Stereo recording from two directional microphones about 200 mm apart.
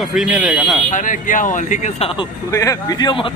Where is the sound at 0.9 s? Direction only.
40° left (ahead or behind).